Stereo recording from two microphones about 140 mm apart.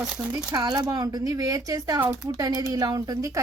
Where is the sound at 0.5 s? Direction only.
30° right (ahead or behind).